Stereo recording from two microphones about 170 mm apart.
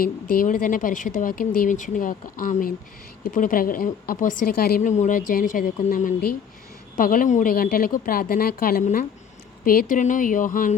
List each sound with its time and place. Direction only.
0.0 s a woman's voice: 55° left (ahead or behind)